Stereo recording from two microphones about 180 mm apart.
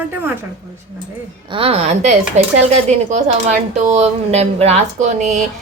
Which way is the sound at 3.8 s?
40° right (ahead or behind).